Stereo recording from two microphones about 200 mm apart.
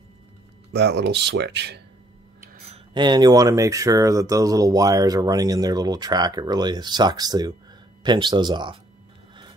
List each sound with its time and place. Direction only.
0.7 s speech: 55° right (ahead or behind)
2.7 s speech: 25° right (ahead or behind)